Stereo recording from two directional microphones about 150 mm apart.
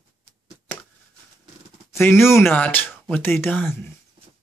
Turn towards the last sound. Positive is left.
turn(degrees=15)  # may be behind; listen again after turning